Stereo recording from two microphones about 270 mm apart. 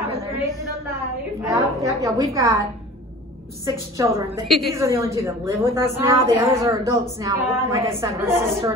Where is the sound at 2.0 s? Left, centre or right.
Centre.